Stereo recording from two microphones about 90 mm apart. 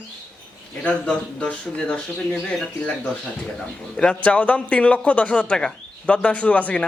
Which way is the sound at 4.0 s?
10° left (ahead or behind).